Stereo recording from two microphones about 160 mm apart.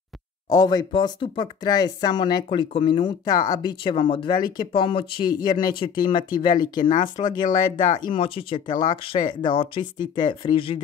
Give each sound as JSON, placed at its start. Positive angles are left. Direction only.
{"t": 0.5, "sound": "speech", "side_deg": 25}